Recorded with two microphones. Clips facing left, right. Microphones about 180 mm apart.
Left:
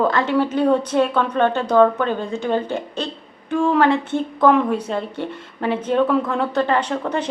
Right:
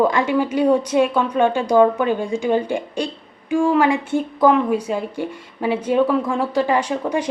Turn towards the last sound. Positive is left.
turn(degrees=-10)  # may be behind; listen again after turning